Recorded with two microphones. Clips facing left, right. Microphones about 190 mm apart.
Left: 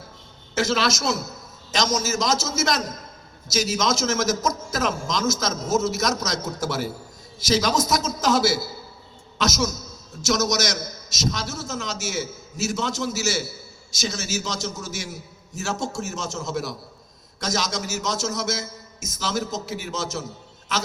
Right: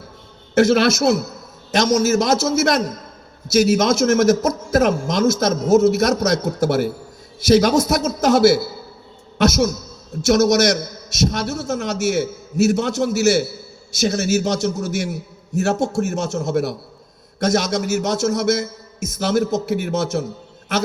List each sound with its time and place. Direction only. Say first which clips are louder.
0.5 s a man's voice: right 9 dB; 60° right (ahead or behind)